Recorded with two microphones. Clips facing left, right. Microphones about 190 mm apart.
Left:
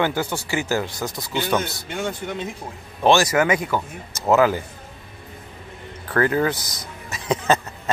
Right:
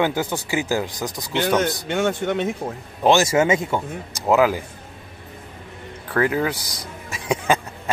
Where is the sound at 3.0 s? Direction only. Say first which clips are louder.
Right 1 dB; 20° right (ahead or behind).